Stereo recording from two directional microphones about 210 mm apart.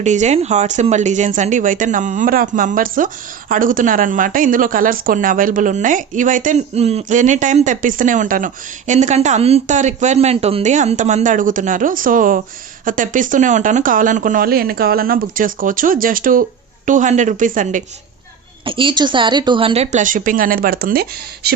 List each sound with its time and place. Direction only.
0.0 s a woman's voice: 35° right (ahead or behind)
18.6 s a woman's voice: 25° right (ahead or behind); by 21.5 s 45° right (ahead or behind)